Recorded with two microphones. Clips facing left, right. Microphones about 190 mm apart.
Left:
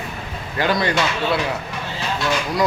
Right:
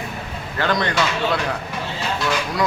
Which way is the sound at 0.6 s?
10° left (ahead or behind).